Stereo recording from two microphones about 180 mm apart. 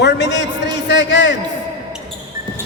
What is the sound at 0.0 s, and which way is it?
A man's voice, 75° left (ahead or behind).